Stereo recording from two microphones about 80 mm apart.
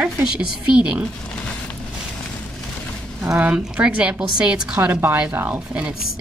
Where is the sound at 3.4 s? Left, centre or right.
Centre.